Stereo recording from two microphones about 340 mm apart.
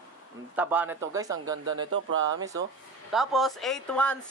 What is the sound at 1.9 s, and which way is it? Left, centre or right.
Speech, right.